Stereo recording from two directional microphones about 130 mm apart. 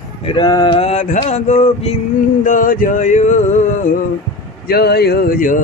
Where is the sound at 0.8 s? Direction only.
65° left (ahead or behind).